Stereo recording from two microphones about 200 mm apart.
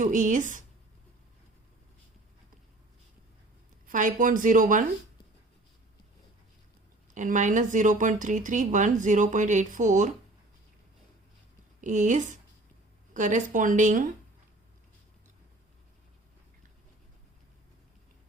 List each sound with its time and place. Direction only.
0.0 s a woman's voice: 40° right (ahead or behind)
3.8 s a woman's voice: 40° right (ahead or behind)
7.1 s a woman's voice: 40° right (ahead or behind)
11.8 s a woman's voice: 40° right (ahead or behind)